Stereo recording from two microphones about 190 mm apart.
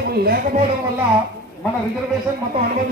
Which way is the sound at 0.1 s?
55° right (ahead or behind).